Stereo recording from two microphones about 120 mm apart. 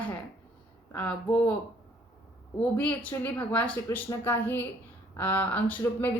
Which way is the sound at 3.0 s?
10° left (ahead or behind).